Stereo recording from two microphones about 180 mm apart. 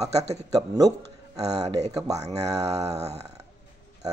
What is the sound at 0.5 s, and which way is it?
Speech, 20° right (ahead or behind).